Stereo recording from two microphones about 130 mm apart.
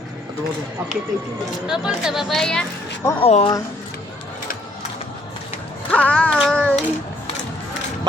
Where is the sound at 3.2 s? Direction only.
50° left (ahead or behind).